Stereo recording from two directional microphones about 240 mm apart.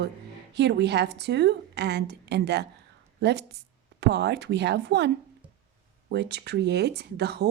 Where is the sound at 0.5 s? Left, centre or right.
Right.